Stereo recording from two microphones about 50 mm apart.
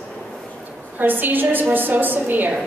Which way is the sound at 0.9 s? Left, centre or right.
Right.